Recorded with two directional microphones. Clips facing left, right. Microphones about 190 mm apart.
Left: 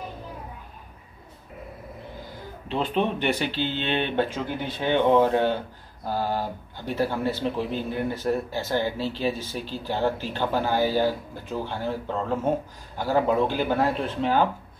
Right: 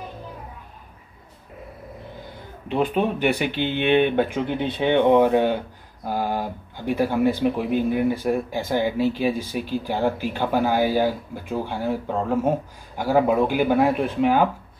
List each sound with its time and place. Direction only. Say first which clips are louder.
2.7 s speech: right 3 dB; 10° right (ahead or behind)